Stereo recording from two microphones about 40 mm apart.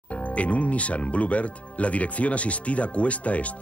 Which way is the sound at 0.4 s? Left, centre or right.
Left.